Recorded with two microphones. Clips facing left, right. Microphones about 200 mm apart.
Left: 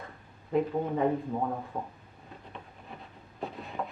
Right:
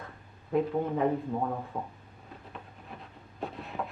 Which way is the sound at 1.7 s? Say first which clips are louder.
Even; 10° left (ahead or behind).